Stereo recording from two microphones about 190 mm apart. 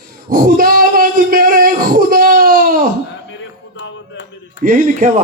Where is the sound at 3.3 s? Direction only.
75° left (ahead or behind).